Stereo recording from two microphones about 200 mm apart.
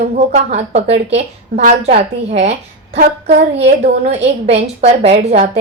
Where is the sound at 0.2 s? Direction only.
35° right (ahead or behind).